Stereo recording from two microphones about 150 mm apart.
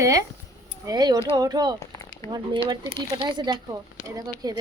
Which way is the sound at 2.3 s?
30° right (ahead or behind).